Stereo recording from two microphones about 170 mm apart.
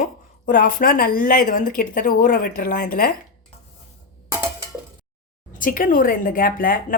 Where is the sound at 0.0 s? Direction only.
55° left (ahead or behind).